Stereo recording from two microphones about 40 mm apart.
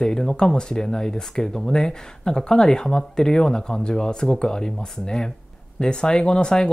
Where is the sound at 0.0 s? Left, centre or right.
Centre.